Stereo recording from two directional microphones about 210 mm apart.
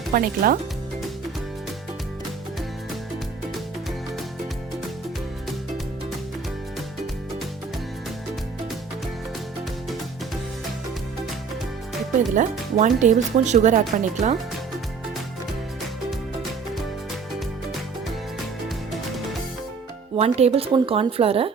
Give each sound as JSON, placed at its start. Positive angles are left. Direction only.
{"t": 0.1, "sound": "speech", "side_deg": -40}
{"t": 12.3, "sound": "speech", "side_deg": -35}
{"t": 20.1, "sound": "speech", "side_deg": -30}